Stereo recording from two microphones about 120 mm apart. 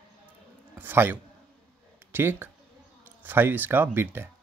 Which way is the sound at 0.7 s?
20° right (ahead or behind).